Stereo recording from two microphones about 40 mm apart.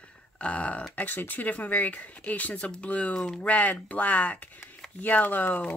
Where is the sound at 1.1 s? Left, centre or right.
Left.